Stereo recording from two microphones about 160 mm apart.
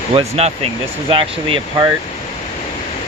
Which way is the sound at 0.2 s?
40° right (ahead or behind).